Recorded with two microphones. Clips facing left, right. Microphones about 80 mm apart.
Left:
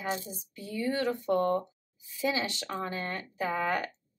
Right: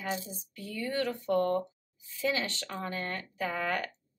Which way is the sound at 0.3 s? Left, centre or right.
Centre.